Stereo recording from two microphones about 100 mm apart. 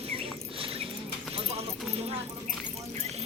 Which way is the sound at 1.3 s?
80° right.